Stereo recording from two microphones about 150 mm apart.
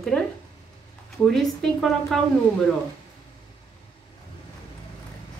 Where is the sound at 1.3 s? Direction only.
5° left (ahead or behind).